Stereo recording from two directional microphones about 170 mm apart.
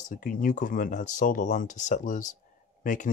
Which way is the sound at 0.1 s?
50° left (ahead or behind).